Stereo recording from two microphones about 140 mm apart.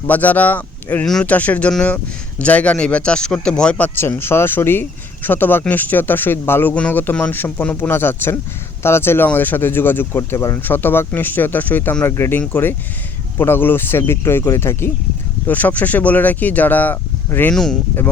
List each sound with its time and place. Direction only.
0.1 s speech: 10° left (ahead or behind)